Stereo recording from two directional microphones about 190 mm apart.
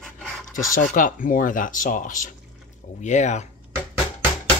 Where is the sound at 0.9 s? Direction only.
45° left (ahead or behind).